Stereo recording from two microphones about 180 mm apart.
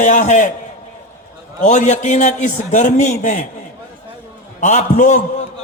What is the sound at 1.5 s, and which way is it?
A man's voice, 40° left (ahead or behind).